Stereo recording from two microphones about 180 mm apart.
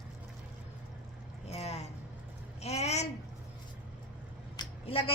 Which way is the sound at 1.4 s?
35° left (ahead or behind).